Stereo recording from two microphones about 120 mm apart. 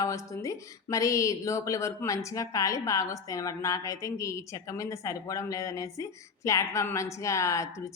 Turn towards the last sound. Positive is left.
turn(degrees=25)  # may be behind; listen again after turning